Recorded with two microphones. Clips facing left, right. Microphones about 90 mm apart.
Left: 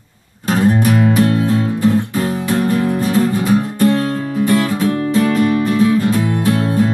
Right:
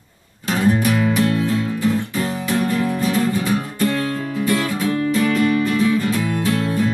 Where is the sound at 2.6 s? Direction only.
45° left (ahead or behind).